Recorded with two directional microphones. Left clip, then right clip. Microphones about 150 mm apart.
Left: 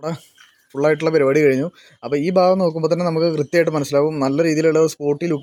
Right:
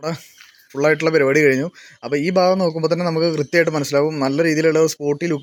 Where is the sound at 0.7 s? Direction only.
5° left (ahead or behind).